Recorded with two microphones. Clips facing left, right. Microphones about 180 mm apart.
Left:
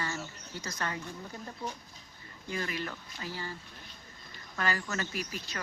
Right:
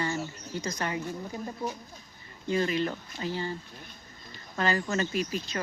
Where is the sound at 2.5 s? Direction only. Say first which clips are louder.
Right 9 dB; 25° right (ahead or behind).